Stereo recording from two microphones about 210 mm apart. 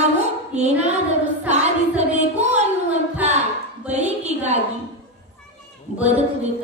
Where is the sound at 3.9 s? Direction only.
30° right (ahead or behind).